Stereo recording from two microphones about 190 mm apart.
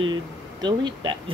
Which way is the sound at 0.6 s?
25° right (ahead or behind).